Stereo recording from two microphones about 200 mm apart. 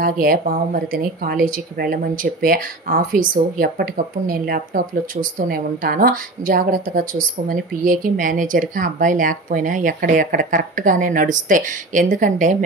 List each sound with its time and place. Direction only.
0.0 s a woman's voice: 45° right (ahead or behind)